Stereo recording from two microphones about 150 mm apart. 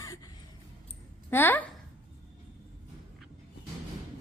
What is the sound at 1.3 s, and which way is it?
Speech, 15° left (ahead or behind).